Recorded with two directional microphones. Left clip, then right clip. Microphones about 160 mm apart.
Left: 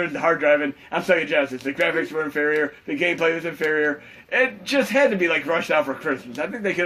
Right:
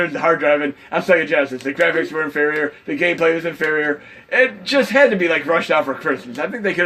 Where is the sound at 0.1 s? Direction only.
30° right (ahead or behind).